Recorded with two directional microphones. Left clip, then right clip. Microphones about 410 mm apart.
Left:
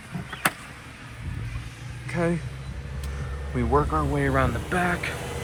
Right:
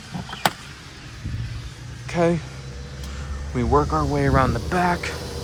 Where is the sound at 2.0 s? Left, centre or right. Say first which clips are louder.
Right 6 dB; centre.